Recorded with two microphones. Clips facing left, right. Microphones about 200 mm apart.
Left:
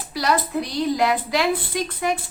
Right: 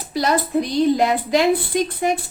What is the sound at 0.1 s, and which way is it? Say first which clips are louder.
A woman's voice: right 3 dB; 25° right (ahead or behind).